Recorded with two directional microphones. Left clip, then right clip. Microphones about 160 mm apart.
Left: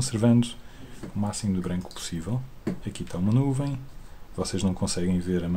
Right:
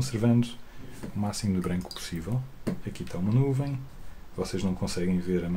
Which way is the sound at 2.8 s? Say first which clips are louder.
Left 3 dB; 20° left (ahead or behind).